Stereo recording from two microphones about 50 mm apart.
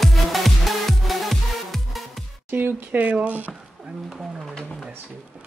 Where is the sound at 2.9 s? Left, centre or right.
Right.